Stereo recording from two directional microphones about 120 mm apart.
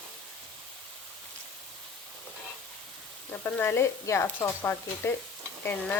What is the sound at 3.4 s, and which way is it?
Speech, 20° left (ahead or behind).